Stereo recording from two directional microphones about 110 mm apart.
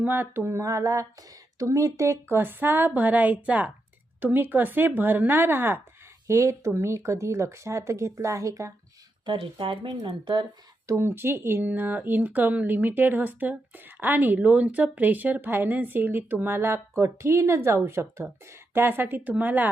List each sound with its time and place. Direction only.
0.0 s speech: 20° right (ahead or behind)
9.2 s speech: 50° right (ahead or behind)
10.8 s speech: 20° right (ahead or behind)